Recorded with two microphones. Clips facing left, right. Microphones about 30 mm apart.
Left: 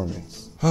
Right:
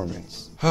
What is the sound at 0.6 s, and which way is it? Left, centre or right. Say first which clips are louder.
Speech: even; right.